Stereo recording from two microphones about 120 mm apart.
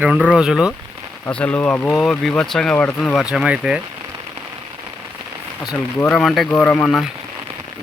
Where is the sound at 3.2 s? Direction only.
5° right (ahead or behind).